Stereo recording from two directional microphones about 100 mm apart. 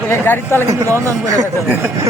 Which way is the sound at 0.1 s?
25° left (ahead or behind).